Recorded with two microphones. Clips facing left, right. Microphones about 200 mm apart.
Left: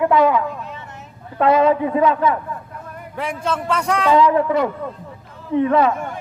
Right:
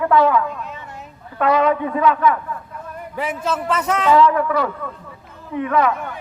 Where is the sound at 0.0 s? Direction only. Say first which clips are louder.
Even; 15° left (ahead or behind).